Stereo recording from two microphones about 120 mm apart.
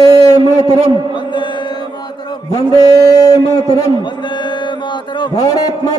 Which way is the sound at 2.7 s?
30° left (ahead or behind).